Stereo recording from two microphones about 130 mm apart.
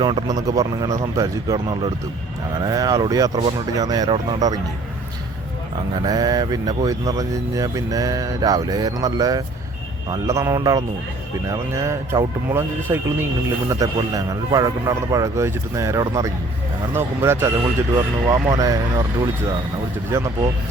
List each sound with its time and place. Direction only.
0.0 s speech: 35° right (ahead or behind)
6.1 s speech: 30° right (ahead or behind)